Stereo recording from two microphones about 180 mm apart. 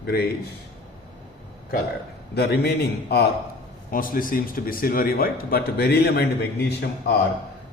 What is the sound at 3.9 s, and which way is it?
Speech, 50° left (ahead or behind).